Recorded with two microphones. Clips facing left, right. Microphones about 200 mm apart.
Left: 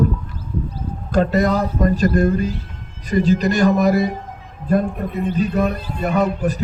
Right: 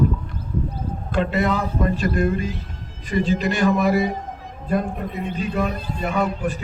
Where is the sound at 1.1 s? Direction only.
40° left (ahead or behind).